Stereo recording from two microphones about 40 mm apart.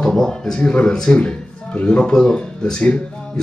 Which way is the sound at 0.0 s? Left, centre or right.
Centre.